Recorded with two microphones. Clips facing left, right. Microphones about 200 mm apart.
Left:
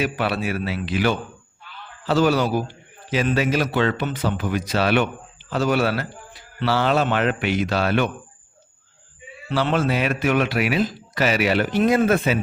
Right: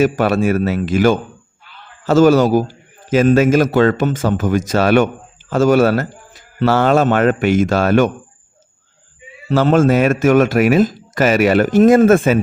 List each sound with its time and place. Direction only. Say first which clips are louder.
0.0 s a man's voice: right 9 dB; 45° right (ahead or behind)
9.5 s a man's voice: right 9 dB; 45° right (ahead or behind)